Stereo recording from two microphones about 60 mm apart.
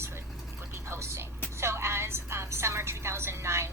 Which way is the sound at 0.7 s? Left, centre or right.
Right.